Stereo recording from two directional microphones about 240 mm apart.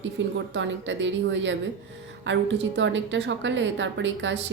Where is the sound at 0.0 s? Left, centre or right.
Right.